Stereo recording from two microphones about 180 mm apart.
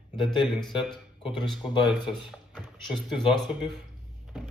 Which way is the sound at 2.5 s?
Centre (ahead or behind).